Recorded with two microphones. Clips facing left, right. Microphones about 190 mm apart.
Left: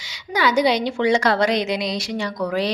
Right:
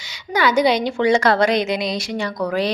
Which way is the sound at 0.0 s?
55° right (ahead or behind).